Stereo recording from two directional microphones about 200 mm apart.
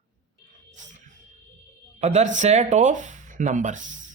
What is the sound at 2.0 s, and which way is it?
A man's voice, 35° right (ahead or behind).